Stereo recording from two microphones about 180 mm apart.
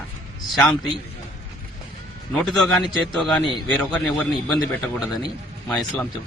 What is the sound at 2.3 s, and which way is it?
A man's voice, centre (ahead or behind).